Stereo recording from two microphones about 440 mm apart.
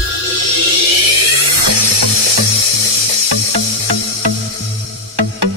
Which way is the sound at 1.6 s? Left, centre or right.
Right.